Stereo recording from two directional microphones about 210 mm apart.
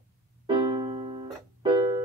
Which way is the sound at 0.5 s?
20° right (ahead or behind).